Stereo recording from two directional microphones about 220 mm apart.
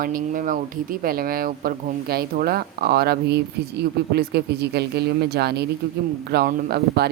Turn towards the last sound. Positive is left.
turn(degrees=-45)  # may be behind; listen again after turning